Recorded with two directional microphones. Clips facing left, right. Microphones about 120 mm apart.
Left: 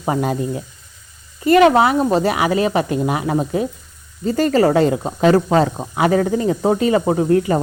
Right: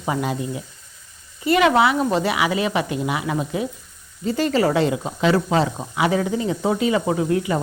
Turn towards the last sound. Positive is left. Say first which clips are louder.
# left 5 dB
turn(degrees=40)  # may be behind; listen again after turning